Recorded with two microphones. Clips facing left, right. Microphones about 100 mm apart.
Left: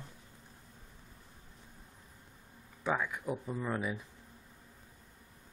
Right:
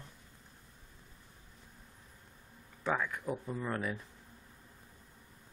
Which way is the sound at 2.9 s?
5° left (ahead or behind).